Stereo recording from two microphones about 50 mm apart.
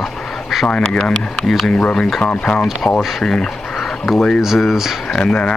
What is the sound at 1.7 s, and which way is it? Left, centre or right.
Speech, centre.